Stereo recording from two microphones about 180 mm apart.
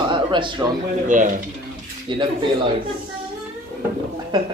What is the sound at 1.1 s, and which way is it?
Speech, 45° right (ahead or behind).